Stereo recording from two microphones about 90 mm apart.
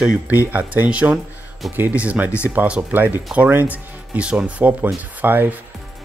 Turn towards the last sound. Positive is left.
turn(degrees=-20)  # may be behind; listen again after turning